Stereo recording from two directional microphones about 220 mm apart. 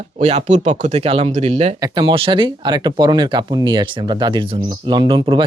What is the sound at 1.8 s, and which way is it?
Speech, 20° right (ahead or behind).